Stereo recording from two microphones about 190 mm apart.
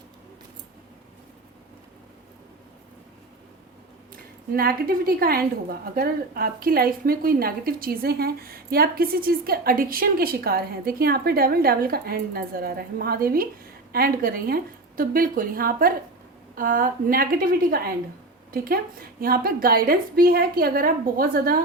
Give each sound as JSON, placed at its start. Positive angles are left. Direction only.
{"t": 4.1, "sound": "a woman's voice", "side_deg": -50}